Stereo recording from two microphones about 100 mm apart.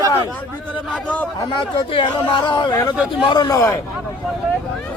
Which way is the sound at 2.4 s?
50° left (ahead or behind).